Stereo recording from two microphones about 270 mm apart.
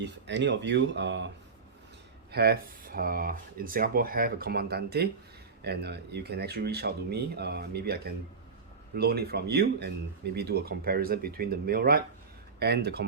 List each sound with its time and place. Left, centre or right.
0.0 s speech: right
2.3 s speech: right